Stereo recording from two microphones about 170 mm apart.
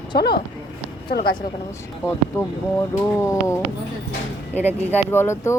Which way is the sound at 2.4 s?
15° left (ahead or behind).